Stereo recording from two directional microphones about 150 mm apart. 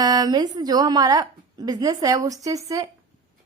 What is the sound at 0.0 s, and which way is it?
A woman's voice, 25° right (ahead or behind).